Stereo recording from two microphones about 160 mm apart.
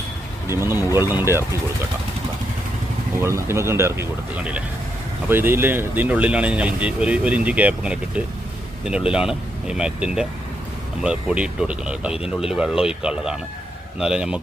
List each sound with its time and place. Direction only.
0.4 s speech: 15° right (ahead or behind)
3.2 s speech: 15° right (ahead or behind)